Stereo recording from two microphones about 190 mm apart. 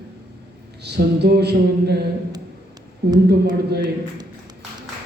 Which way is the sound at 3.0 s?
60° right (ahead or behind).